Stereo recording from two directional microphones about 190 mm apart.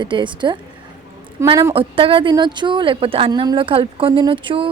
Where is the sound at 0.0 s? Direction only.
25° right (ahead or behind).